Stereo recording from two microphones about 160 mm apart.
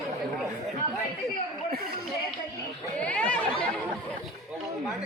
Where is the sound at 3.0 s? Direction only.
10° left (ahead or behind).